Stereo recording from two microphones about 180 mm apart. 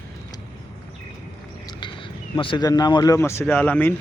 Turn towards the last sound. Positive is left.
turn(degrees=10)  # may be behind; listen again after turning